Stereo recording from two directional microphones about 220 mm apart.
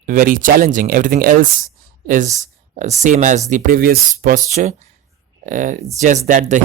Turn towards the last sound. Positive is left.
turn(degrees=-35)  # may be behind; listen again after turning